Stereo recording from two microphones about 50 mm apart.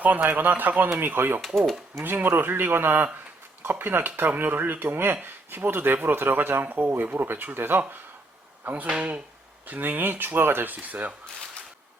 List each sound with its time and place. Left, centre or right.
0.0 s speech: right
1.4 s speech: centre
2.0 s speech: right
8.6 s speech: right